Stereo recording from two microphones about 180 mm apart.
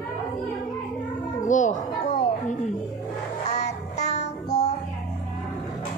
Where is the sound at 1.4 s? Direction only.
45° left (ahead or behind).